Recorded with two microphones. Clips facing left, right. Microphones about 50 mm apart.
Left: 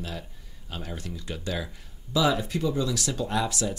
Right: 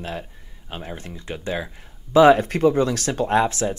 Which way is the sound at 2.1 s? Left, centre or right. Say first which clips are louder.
Right 11 dB; right.